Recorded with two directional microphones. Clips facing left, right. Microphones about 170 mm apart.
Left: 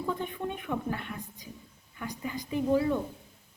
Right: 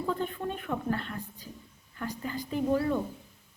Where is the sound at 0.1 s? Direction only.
15° left (ahead or behind).